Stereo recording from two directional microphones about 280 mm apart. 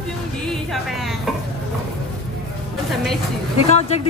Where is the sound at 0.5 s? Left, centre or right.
Centre.